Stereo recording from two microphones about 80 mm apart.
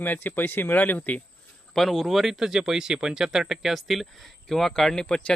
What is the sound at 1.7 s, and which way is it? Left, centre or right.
Speech, centre.